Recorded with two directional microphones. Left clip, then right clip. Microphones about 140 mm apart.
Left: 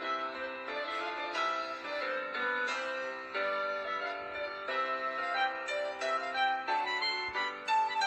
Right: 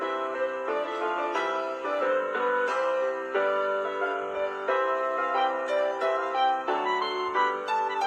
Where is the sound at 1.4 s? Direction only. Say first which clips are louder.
Right 6 dB; 45° right (ahead or behind).